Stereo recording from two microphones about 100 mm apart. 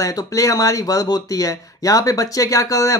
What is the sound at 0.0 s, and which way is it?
Speech, 35° left (ahead or behind).